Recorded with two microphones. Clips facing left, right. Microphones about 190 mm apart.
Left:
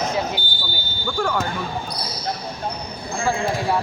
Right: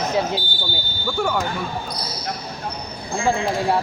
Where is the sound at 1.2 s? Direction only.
10° right (ahead or behind).